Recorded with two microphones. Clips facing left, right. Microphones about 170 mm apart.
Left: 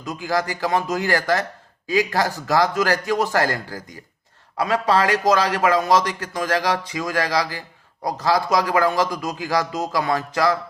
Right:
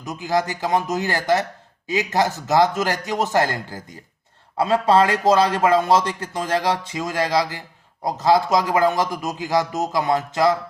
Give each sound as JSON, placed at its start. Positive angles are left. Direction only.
{"t": 0.0, "sound": "a man's voice", "side_deg": -20}